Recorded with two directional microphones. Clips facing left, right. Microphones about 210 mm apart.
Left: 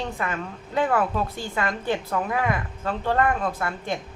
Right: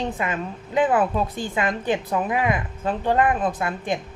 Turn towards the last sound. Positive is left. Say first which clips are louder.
# right 3 dB
turn(degrees=-15)  # may be behind; listen again after turning